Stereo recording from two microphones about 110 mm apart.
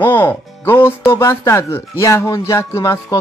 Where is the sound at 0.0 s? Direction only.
20° left (ahead or behind).